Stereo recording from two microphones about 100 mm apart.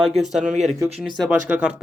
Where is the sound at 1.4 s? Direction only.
15° right (ahead or behind).